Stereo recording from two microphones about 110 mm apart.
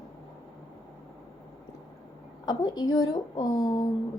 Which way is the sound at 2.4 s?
40° left (ahead or behind).